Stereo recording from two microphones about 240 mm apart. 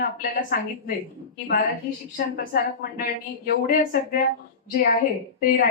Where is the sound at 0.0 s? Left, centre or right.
Left.